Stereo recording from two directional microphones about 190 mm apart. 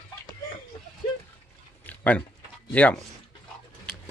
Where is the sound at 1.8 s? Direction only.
10° left (ahead or behind).